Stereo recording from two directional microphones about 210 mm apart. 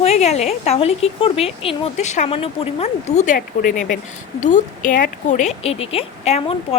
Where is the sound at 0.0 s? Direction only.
30° left (ahead or behind).